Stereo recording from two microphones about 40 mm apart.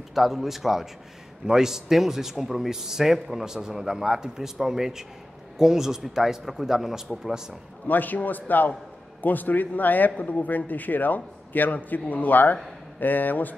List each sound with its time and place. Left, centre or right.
0.1 s a man's voice: centre
7.9 s a man's voice: left